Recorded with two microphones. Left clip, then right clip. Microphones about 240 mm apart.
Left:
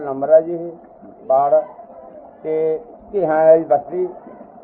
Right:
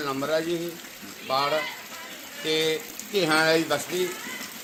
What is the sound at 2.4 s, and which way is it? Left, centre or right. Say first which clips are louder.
Speech: left 6 dB; centre.